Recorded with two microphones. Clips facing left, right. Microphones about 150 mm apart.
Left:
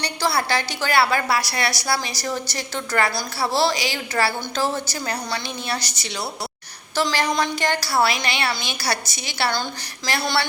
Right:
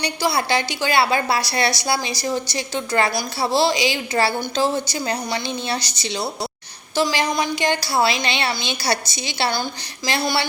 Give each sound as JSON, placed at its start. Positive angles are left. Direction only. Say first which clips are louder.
{"t": 0.0, "sound": "a woman's voice", "louder": "right 2 dB", "side_deg": -15}